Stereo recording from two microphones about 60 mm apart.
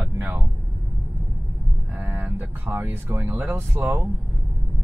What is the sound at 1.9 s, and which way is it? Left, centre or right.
Speech, right.